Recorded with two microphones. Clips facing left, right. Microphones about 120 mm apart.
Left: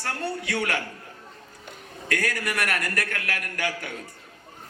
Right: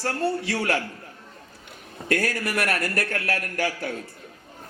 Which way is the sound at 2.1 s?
30° right (ahead or behind).